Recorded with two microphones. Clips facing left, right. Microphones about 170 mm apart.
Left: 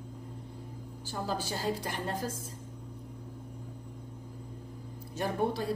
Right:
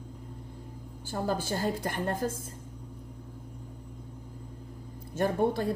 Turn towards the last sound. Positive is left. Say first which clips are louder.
# right 4 dB
turn(degrees=-50)  # may be behind; listen again after turning